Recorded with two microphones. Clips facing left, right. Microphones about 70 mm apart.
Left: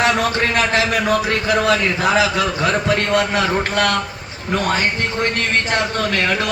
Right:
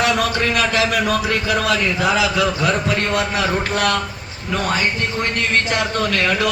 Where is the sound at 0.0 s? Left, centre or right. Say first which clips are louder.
Left 1 dB; left.